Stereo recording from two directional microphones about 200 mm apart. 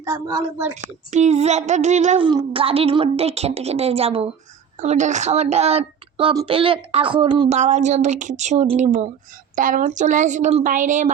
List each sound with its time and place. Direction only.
0.0 s a woman's voice: 15° right (ahead or behind)
0.7 s a child's voice: 35° right (ahead or behind)
2.2 s a woman's voice: 25° right (ahead or behind)
7.6 s a child's voice: 35° right (ahead or behind)